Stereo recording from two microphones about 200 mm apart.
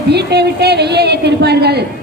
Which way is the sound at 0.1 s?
55° right (ahead or behind).